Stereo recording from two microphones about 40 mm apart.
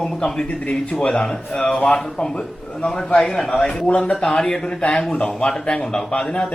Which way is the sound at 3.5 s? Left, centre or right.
Left.